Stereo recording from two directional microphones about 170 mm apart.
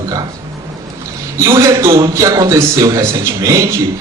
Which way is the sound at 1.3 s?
15° right (ahead or behind).